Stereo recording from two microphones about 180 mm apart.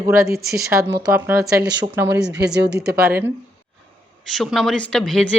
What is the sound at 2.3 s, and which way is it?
Speech, 70° right (ahead or behind).